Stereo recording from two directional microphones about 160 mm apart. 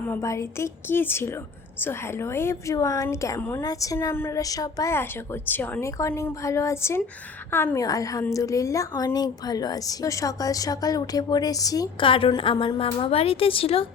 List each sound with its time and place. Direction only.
0.0 s a woman's voice: 15° left (ahead or behind); by 13.8 s 35° left (ahead or behind)